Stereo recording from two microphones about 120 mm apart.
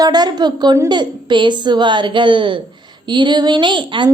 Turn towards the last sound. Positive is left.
turn(degrees=-40)  # may be behind; listen again after turning